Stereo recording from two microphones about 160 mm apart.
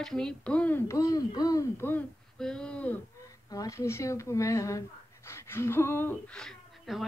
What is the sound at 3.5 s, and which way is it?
Speech, 20° left (ahead or behind).